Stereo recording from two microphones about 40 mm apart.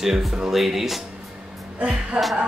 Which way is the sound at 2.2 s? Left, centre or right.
Centre.